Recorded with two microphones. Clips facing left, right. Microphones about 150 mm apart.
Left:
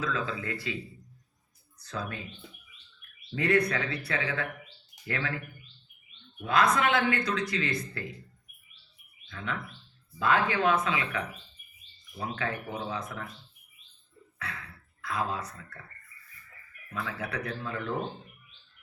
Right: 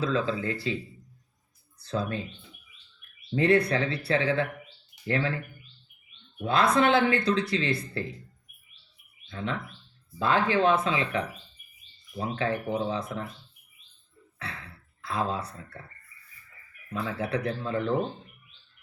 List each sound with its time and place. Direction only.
0.0 s speech: 30° right (ahead or behind)
1.8 s speech: 30° right (ahead or behind)
3.3 s speech: 30° right (ahead or behind)
6.4 s speech: 30° right (ahead or behind)
9.2 s speech: 30° right (ahead or behind)
14.3 s a sound: 30° right (ahead or behind)
16.9 s speech: 30° right (ahead or behind)